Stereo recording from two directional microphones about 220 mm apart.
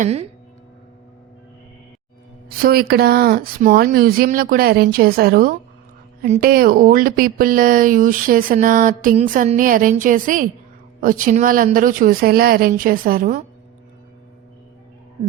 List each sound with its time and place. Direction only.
0.0 s speech: 30° right (ahead or behind)
2.6 s speech: 45° right (ahead or behind)